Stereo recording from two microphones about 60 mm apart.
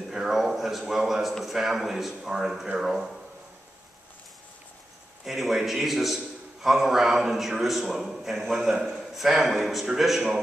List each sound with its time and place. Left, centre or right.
0.1 s a man's voice: centre
5.2 s a man's voice: centre